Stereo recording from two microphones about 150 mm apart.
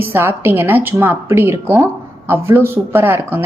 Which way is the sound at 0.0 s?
15° right (ahead or behind).